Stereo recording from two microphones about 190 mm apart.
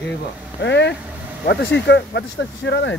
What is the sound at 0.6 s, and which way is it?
Speech, 65° left (ahead or behind).